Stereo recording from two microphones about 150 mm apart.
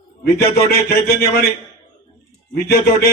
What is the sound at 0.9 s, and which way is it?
Speech, 90° left.